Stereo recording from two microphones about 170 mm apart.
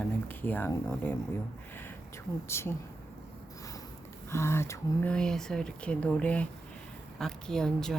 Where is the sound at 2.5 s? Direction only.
15° left (ahead or behind).